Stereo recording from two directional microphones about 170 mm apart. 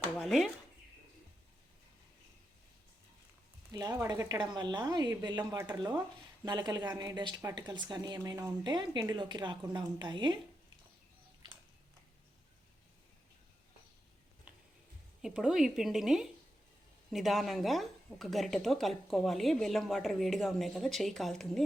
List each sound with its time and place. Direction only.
0.2 s speech: centre (ahead or behind)
3.7 s a woman's voice: 20° right (ahead or behind)
15.2 s speech: 5° right (ahead or behind)